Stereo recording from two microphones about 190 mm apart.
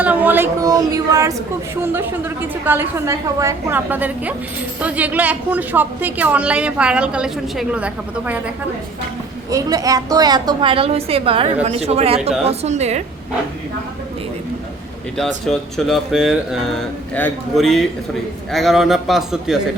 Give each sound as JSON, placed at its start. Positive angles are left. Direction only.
{"t": 0.0, "sound": "a woman's voice", "side_deg": -10}
{"t": 9.5, "sound": "a woman's voice", "side_deg": -20}
{"t": 15.2, "sound": "speech", "side_deg": 0}